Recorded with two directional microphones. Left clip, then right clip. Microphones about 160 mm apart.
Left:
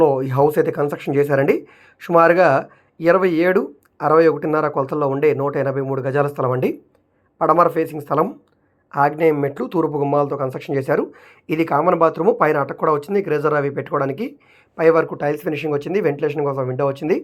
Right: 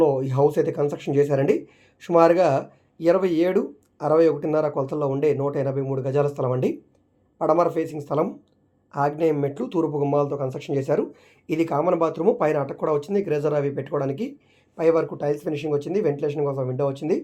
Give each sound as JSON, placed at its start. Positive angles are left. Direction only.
{"t": 0.0, "sound": "speech", "side_deg": 20}
{"t": 9.8, "sound": "speech", "side_deg": 55}
{"t": 10.2, "sound": "speech", "side_deg": 20}